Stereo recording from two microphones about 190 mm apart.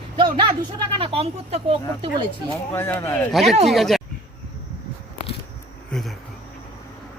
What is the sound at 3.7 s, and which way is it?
Speech, centre (ahead or behind).